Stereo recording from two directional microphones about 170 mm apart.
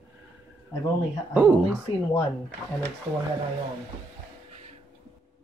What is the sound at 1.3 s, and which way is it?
Speech, 10° right (ahead or behind).